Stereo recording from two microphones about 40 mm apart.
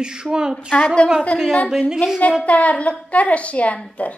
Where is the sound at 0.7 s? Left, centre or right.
Left.